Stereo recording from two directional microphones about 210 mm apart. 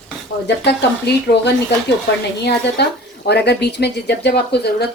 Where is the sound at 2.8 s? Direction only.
55° left (ahead or behind).